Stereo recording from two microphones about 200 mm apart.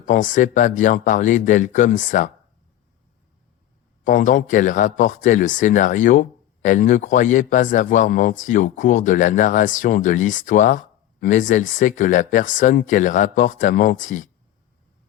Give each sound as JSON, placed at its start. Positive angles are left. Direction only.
{"t": 0.0, "sound": "speech", "side_deg": 40}
{"t": 4.0, "sound": "speech", "side_deg": 40}